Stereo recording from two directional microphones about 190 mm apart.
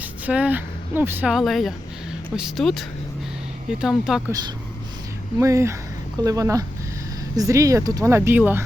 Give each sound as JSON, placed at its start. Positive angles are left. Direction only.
{"t": 0.0, "sound": "speech", "side_deg": -10}
{"t": 4.3, "sound": "speech", "side_deg": -20}